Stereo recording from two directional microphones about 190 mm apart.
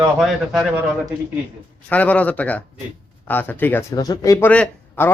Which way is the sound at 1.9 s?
10° left (ahead or behind).